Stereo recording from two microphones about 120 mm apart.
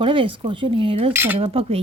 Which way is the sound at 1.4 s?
55° right (ahead or behind).